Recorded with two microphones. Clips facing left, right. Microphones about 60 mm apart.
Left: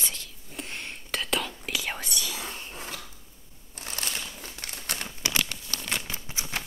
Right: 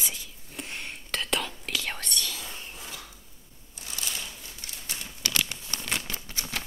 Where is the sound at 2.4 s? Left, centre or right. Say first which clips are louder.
Left 3 dB; left.